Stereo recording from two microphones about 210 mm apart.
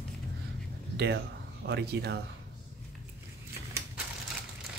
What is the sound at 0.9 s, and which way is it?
Speech, 55° right (ahead or behind).